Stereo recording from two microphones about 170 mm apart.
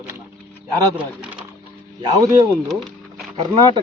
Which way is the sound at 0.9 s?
5° right (ahead or behind).